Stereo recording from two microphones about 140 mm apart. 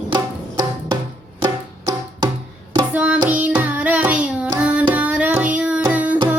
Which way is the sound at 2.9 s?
10° right (ahead or behind).